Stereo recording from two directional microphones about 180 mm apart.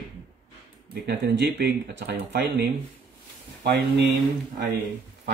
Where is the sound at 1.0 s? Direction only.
75° right (ahead or behind).